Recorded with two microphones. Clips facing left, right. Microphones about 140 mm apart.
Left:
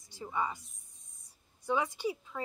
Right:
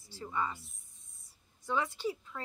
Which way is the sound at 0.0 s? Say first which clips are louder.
Left 1 dB; 15° left (ahead or behind).